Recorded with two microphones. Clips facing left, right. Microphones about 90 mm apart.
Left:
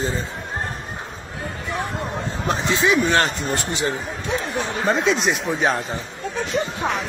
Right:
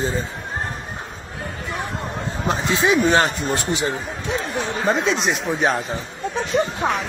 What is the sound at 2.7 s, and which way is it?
Speech, 20° right (ahead or behind).